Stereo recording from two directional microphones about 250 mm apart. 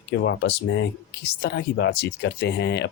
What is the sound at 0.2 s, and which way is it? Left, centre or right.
Speech, left.